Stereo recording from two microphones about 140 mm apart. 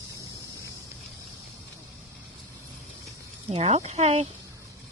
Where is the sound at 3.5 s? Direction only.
50° right (ahead or behind).